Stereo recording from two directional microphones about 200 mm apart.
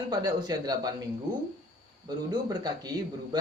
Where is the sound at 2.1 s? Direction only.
20° right (ahead or behind).